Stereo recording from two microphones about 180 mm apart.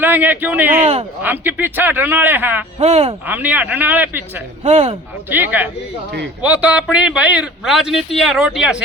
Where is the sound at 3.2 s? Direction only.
10° right (ahead or behind).